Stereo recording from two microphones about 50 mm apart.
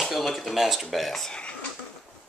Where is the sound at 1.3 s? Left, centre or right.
Centre.